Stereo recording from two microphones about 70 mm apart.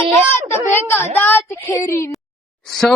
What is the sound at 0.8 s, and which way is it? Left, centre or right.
Speech, left.